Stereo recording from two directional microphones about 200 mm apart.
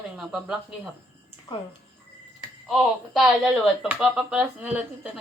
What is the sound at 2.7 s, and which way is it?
A woman's voice, centre (ahead or behind).